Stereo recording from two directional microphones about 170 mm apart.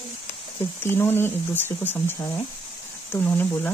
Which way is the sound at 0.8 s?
15° left (ahead or behind).